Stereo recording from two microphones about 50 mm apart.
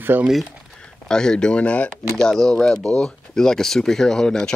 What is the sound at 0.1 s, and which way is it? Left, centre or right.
Speech, right.